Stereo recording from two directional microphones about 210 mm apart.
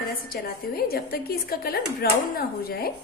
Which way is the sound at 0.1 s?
45° left (ahead or behind).